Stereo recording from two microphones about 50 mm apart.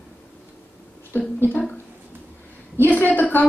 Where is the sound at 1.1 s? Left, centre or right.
Left.